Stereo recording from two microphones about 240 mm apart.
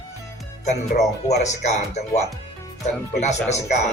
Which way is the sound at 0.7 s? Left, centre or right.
Left.